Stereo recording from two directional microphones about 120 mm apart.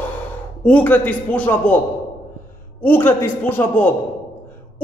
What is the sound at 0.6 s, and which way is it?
A man's voice, 10° left (ahead or behind).